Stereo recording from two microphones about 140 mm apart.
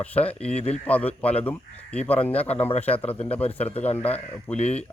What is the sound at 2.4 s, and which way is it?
Speech, 45° left (ahead or behind).